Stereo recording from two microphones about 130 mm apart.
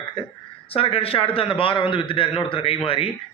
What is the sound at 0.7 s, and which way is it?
A man's voice, 45° left (ahead or behind).